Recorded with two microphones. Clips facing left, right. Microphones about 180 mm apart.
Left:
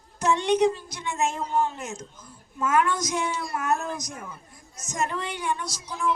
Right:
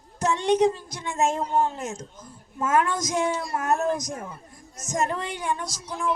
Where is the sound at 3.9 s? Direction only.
50° right (ahead or behind).